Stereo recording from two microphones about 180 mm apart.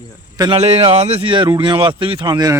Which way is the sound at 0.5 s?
35° right (ahead or behind).